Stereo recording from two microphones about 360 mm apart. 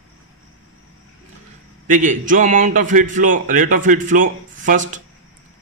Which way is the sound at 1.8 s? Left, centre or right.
Right.